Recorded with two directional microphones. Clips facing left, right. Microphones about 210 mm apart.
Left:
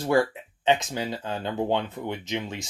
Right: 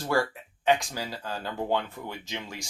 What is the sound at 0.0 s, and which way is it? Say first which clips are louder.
Speech: left 5 dB; 20° left (ahead or behind).